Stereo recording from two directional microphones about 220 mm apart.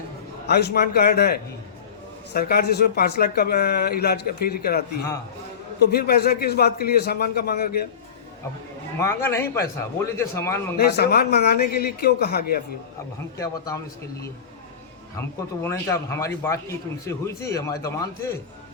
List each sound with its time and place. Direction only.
0.4 s speech: 45° left (ahead or behind)
5.9 s speech: 45° left (ahead or behind)
9.0 s speech: 10° left (ahead or behind)
10.8 s speech: 45° left (ahead or behind)
13.3 s speech: 15° left (ahead or behind)
15.1 s speech: 10° left (ahead or behind)